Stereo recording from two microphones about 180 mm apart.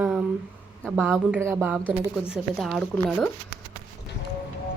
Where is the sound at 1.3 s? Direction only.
15° right (ahead or behind).